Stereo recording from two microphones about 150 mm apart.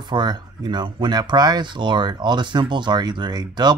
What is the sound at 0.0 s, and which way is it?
Speech, 30° right (ahead or behind).